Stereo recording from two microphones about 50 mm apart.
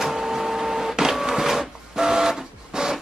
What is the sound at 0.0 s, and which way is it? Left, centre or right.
Printer, centre.